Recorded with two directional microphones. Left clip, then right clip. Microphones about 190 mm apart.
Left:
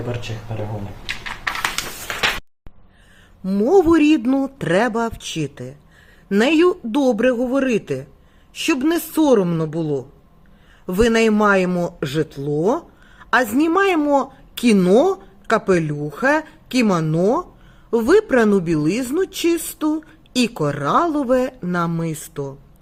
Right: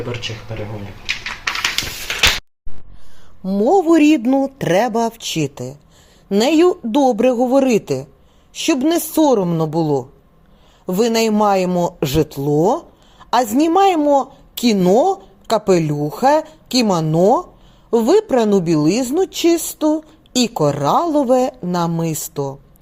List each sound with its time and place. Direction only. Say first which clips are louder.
0.1 s speech: right 3 dB; 25° left (ahead or behind)
1.0 s a sound: right 4 dB; centre (ahead or behind)
3.4 s speech: right 1 dB; 5° left (ahead or behind); by 5.7 s 10° right (ahead or behind)
6.2 s speech: right 2 dB; centre (ahead or behind)
17.9 s speech: right 1 dB; centre (ahead or behind)